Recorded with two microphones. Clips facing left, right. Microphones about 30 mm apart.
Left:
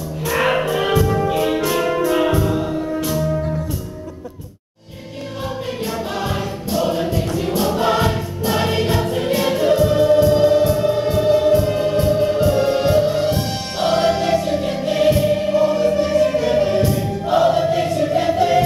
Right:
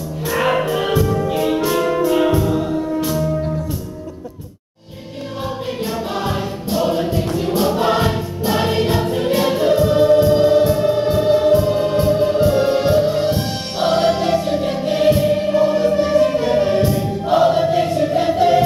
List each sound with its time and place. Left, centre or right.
0.5 s music: centre
1.0 s music: centre
6.3 s choir: centre
8.7 s music: centre
11.5 s music: centre
16.4 s choir: centre
18.3 s music: centre